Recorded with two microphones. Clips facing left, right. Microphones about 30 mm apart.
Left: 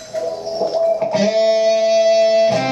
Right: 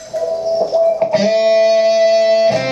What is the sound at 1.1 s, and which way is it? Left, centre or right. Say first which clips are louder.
Music: right 2 dB; centre.